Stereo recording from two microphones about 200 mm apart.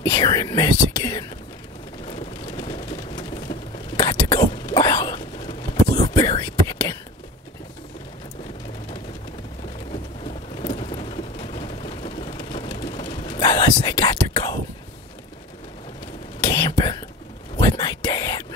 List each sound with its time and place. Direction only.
0.0 s speech: 20° left (ahead or behind)
2.0 s rain: 25° left (ahead or behind)
4.0 s whispering: 20° left (ahead or behind)
10.2 s a sound: 30° left (ahead or behind)
12.8 s whispering: 20° left (ahead or behind)
16.4 s whispering: 20° left (ahead or behind)